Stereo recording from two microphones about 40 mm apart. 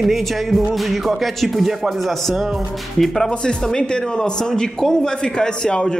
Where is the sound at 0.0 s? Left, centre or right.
Centre.